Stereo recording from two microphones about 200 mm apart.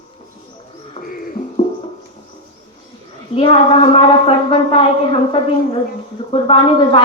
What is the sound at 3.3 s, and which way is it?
A woman's voice, 30° left (ahead or behind).